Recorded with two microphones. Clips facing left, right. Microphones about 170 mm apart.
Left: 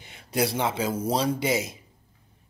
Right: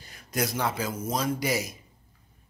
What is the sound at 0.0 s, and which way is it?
Speech, 25° left (ahead or behind).